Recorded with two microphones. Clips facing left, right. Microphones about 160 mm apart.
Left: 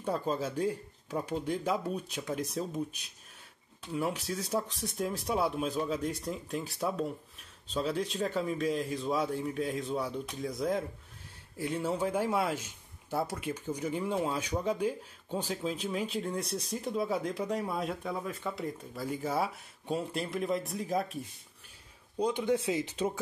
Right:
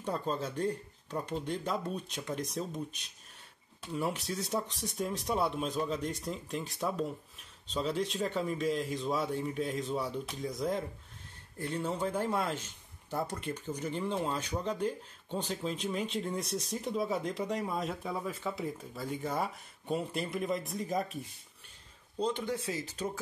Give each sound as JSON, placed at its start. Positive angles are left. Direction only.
{"t": 0.0, "sound": "speech", "side_deg": 5}
{"t": 22.2, "sound": "speech", "side_deg": 15}